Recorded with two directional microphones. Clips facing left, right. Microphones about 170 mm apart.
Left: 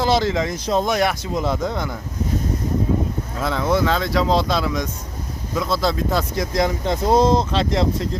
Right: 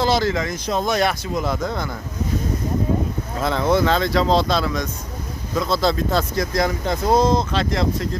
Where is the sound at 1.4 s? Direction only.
25° left (ahead or behind).